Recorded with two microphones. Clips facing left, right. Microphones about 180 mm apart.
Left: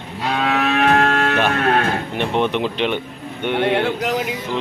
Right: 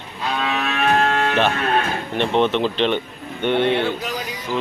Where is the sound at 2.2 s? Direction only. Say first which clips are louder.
Right 3 dB; 10° left (ahead or behind).